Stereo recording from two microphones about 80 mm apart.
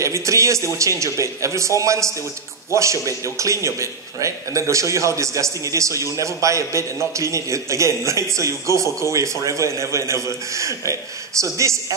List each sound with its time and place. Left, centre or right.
0.0 s a man's voice: right